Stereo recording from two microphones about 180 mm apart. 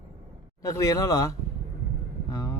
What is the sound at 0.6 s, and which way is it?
Speech, 20° left (ahead or behind).